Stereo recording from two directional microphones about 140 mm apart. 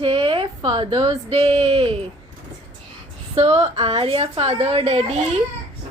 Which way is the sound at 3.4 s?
50° right (ahead or behind).